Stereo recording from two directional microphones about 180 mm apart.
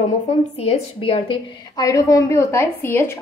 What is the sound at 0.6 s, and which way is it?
A woman's voice, 35° left (ahead or behind).